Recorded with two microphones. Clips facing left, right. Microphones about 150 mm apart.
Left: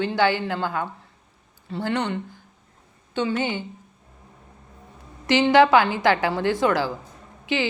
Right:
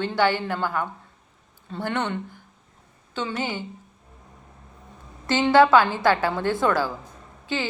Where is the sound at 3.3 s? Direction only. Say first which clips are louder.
Left 3 dB; 20° left (ahead or behind).